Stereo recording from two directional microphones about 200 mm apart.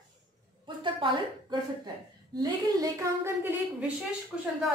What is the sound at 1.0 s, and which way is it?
Speech, 25° right (ahead or behind).